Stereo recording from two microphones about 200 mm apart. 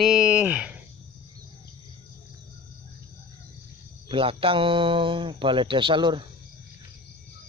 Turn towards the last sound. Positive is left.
turn(degrees=-25)  # may be behind; listen again after turning